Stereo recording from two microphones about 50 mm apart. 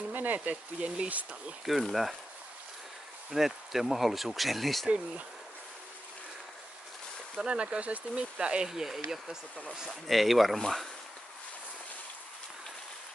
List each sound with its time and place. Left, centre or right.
0.1 s speech: right
0.7 s speech: right
1.7 s speech: centre
3.3 s speech: centre
4.8 s speech: right
7.4 s speech: right
8.6 s speech: centre